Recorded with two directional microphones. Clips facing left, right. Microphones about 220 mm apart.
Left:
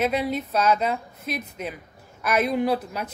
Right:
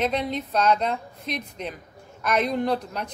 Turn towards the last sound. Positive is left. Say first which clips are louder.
# left 1 dB
turn(degrees=5)  # may be behind; listen again after turning